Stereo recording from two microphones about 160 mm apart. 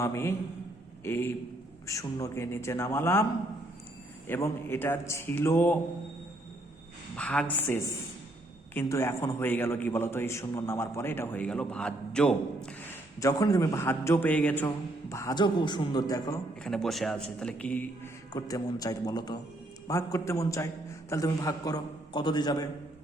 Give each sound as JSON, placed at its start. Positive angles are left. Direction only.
{"t": 0.0, "sound": "a man's voice", "side_deg": 15}
{"t": 4.3, "sound": "a man's voice", "side_deg": 15}
{"t": 7.2, "sound": "a man's voice", "side_deg": 5}
{"t": 13.1, "sound": "a man's voice", "side_deg": 20}
{"t": 16.6, "sound": "a man's voice", "side_deg": 5}
{"t": 18.3, "sound": "a man's voice", "side_deg": 20}